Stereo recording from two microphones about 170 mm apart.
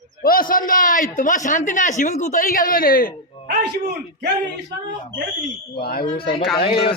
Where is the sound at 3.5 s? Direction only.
80° right.